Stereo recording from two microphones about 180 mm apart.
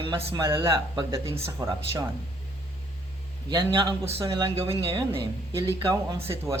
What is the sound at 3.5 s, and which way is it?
Speech, 25° right (ahead or behind).